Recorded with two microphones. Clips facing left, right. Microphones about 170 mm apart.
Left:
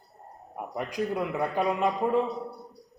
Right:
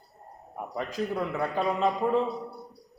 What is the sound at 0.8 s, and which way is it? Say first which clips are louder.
A man's voice: left 1 dB; 15° left (ahead or behind).